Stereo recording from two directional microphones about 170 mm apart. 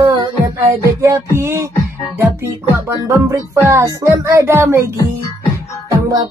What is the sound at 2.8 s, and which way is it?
Speech, 20° right (ahead or behind).